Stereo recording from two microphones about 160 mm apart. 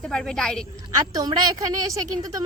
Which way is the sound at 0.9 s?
25° right (ahead or behind).